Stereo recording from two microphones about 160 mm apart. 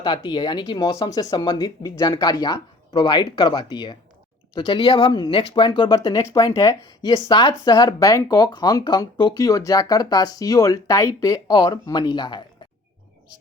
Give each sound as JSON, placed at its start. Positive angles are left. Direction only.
{"t": 0.0, "sound": "speech", "side_deg": 30}